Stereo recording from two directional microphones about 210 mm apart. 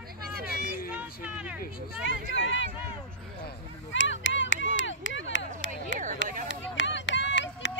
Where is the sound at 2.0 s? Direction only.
60° left (ahead or behind).